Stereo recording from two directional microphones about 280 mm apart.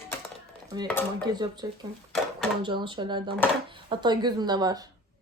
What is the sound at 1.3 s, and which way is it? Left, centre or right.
Speech, centre.